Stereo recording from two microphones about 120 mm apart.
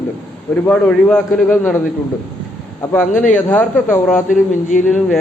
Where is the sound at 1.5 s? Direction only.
15° left (ahead or behind).